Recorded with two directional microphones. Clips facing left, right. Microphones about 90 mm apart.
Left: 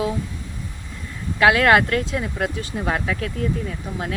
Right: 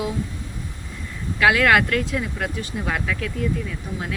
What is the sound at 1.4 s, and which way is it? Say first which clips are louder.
Speech: left 2 dB; 30° left (ahead or behind).